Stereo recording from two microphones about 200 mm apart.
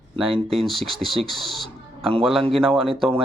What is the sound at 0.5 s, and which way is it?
Speech, centre (ahead or behind).